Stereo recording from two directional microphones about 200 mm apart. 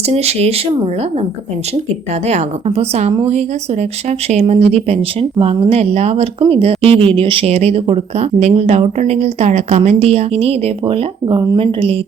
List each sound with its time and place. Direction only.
0.1 s speech: 30° right (ahead or behind)
2.2 s speech: 30° right (ahead or behind)